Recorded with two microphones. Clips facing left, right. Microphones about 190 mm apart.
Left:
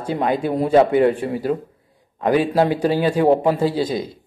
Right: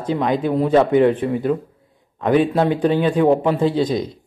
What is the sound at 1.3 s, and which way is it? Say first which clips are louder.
Speech: right 2 dB; 40° left (ahead or behind).